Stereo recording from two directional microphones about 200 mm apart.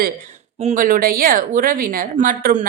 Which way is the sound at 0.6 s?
40° right (ahead or behind).